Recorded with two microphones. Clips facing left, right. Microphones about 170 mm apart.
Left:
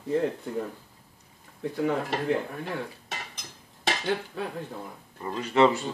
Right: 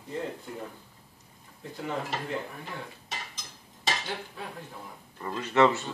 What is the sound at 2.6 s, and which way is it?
Dishes, 60° left (ahead or behind).